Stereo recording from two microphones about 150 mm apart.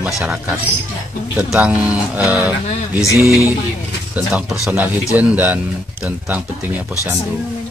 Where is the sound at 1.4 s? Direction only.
10° right (ahead or behind).